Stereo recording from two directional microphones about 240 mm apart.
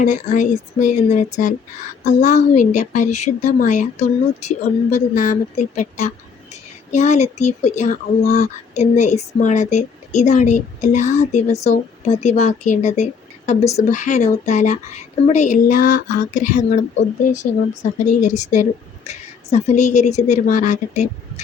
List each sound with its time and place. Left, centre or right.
0.0 s speech: left
18.0 s speech: left